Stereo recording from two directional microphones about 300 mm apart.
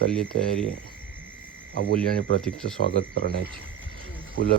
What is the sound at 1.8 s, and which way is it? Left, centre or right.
Speech, right.